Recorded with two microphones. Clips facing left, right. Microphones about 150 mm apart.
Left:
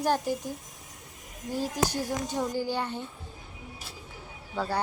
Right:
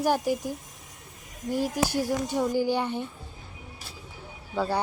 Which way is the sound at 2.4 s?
15° right (ahead or behind).